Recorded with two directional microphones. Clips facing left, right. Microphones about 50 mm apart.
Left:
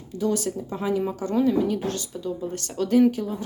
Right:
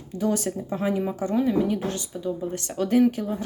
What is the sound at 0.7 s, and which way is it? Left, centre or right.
Speech, centre.